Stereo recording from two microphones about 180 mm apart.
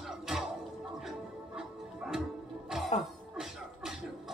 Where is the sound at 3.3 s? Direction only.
Centre (ahead or behind).